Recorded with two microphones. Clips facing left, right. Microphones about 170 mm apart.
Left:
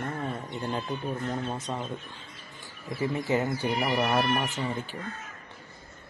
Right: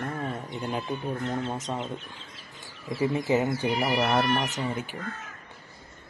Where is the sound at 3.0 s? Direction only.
20° right (ahead or behind).